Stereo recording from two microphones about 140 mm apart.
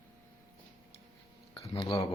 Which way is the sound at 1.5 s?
40° left (ahead or behind).